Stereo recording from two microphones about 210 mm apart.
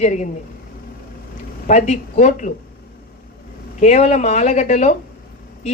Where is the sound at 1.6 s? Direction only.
30° left (ahead or behind).